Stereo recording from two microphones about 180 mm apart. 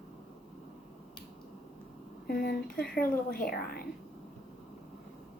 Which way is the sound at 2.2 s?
55° left (ahead or behind).